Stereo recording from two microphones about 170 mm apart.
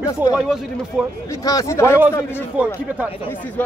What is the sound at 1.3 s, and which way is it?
Speech, 20° left (ahead or behind).